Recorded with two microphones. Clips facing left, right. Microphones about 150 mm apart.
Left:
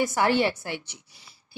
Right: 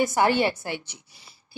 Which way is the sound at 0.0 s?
20° right (ahead or behind).